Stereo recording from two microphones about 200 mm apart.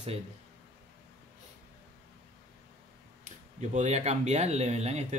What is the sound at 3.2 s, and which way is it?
Speech, 35° right (ahead or behind).